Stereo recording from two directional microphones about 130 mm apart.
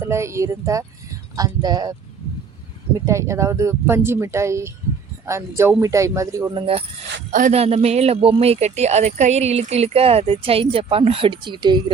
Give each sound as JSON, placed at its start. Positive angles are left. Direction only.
{"t": 0.0, "sound": "speech", "side_deg": -20}
{"t": 3.1, "sound": "speech", "side_deg": -20}
{"t": 6.5, "sound": "speech", "side_deg": -45}
{"t": 7.5, "sound": "speech", "side_deg": -55}